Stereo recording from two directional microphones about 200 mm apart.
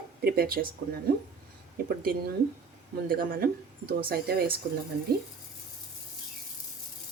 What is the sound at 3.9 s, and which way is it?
Speech, 50° right (ahead or behind).